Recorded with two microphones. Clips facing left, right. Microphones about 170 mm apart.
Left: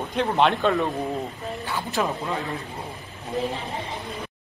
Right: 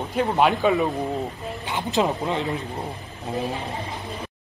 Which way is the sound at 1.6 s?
20° right (ahead or behind).